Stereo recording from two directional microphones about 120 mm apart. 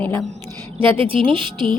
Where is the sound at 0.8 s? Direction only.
45° right (ahead or behind).